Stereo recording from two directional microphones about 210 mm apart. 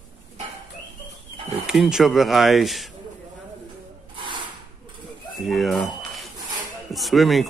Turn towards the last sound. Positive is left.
turn(degrees=0)  # may be behind; listen again after turning